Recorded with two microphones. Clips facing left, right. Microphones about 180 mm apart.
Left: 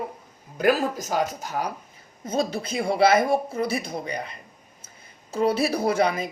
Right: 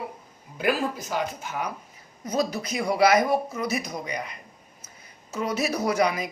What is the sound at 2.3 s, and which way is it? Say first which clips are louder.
Speech: left 1 dB; 25° left (ahead or behind).